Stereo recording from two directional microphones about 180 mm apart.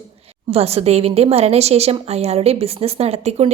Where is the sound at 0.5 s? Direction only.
35° right (ahead or behind).